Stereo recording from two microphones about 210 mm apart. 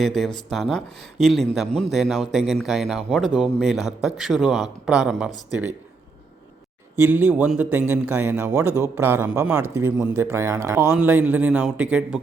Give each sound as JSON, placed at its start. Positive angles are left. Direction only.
{"t": 0.0, "sound": "a man's voice", "side_deg": 0}
{"t": 6.9, "sound": "speech", "side_deg": -10}